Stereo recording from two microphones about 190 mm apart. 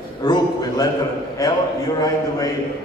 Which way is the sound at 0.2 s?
20° left (ahead or behind).